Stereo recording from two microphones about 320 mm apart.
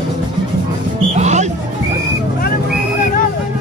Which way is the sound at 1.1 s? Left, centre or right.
Right.